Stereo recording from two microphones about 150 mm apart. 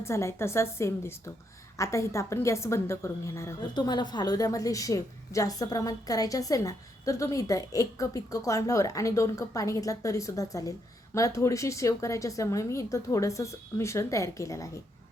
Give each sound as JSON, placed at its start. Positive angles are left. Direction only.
{"t": 0.0, "sound": "a woman's voice", "side_deg": 20}